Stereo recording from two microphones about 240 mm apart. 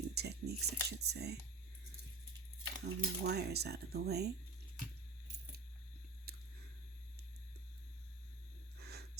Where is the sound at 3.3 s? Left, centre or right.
Right.